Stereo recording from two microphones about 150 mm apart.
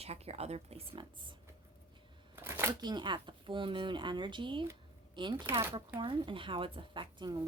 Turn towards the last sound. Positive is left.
turn(degrees=-30)  # may be behind; listen again after turning